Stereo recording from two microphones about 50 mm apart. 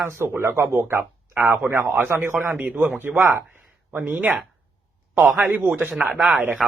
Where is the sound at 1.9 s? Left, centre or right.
Right.